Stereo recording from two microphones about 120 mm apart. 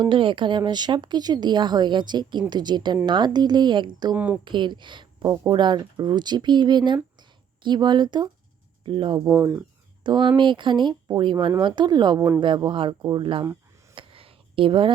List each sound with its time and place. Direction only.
0.0 s speech: 45° right (ahead or behind)
4.1 s speech: 15° right (ahead or behind)
4.4 s a woman's voice: 40° right (ahead or behind)
9.2 s speech: 20° right (ahead or behind)
10.0 s speech: 40° right (ahead or behind)
13.9 s a sound: 50° right (ahead or behind)